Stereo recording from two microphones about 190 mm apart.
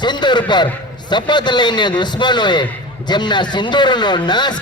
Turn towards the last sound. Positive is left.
turn(degrees=25)  # may be behind; listen again after turning